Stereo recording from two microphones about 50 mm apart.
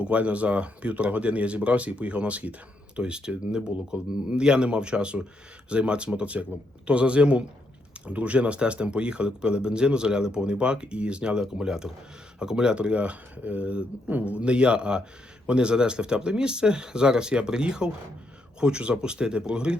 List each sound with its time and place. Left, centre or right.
0.0 s speech: right
3.0 s speech: centre